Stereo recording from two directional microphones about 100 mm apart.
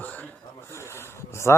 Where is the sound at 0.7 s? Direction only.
25° left (ahead or behind).